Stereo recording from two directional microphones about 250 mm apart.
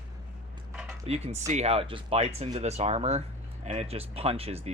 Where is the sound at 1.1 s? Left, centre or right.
Right.